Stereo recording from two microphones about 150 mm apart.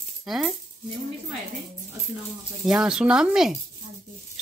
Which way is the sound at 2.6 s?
5° right (ahead or behind).